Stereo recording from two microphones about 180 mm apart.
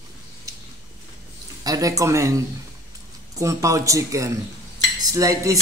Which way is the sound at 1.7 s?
20° right (ahead or behind).